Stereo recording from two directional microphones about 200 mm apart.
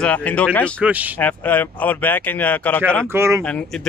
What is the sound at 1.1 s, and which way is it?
Speech, 10° left (ahead or behind).